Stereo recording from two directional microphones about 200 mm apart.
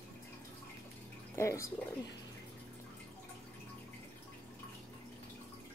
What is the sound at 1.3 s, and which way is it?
Speech, 15° left (ahead or behind).